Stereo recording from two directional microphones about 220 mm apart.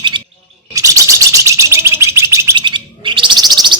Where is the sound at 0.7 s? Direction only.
15° right (ahead or behind).